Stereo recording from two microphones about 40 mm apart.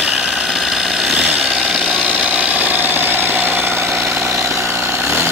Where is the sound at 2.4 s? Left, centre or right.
Right.